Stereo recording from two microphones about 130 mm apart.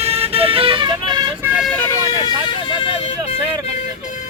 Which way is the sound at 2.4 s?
45° left (ahead or behind).